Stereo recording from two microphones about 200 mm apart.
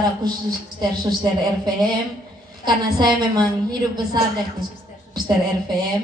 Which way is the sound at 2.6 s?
20° right (ahead or behind).